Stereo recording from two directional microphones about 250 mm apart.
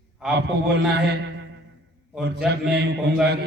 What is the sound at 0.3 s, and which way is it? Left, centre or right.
Speech, right.